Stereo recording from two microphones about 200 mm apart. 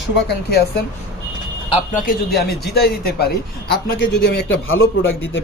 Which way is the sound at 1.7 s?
40° left (ahead or behind).